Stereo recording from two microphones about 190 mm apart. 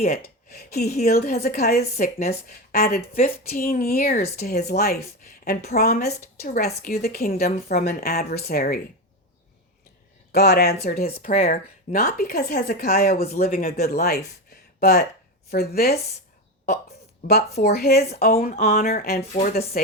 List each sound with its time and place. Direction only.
0.1 s speech: 55° left (ahead or behind)
10.3 s speech: 60° left (ahead or behind)
17.2 s speech: 55° left (ahead or behind)